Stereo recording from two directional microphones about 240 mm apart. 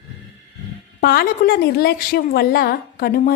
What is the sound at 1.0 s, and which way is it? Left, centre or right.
A woman's voice, left.